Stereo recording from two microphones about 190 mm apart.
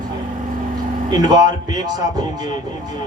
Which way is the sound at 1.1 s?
20° right (ahead or behind).